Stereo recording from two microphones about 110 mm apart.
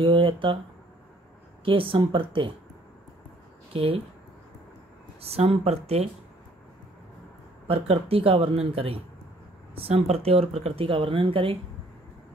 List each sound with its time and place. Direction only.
0.0 s speech: 50° right (ahead or behind)
1.6 s speech: 55° right (ahead or behind)
3.7 s speech: 65° right (ahead or behind)
5.2 s speech: 65° right (ahead or behind)
7.6 s speech: 60° right (ahead or behind)